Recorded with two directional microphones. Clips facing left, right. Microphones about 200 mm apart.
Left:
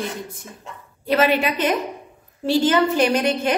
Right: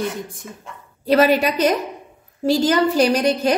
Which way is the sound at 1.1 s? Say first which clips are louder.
Right 3 dB; 40° right (ahead or behind).